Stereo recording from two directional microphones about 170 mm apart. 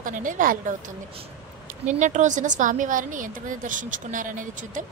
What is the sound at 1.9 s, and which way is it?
A woman's voice, 45° right (ahead or behind).